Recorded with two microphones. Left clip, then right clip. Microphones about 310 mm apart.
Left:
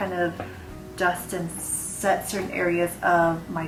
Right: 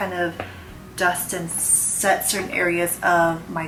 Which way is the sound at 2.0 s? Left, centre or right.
Centre.